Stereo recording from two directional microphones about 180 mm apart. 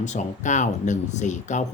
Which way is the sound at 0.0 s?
40° left (ahead or behind).